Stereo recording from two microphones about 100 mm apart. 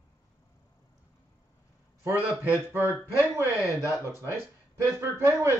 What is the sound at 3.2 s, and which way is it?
A man's voice, 20° right (ahead or behind).